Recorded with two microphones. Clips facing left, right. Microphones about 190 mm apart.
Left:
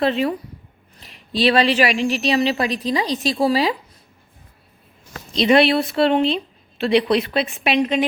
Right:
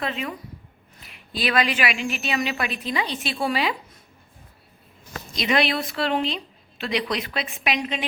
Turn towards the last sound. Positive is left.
turn(degrees=30)  # may be behind; listen again after turning